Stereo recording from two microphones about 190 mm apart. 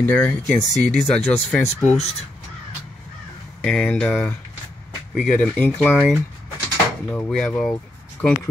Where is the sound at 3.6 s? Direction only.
5° left (ahead or behind).